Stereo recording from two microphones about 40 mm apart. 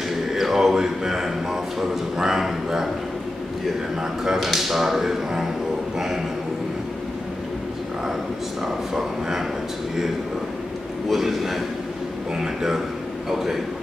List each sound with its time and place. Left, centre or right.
0.3 s a man's voice: centre
4.0 s a man's voice: centre
8.6 s a man's voice: centre
11.1 s a man's voice: centre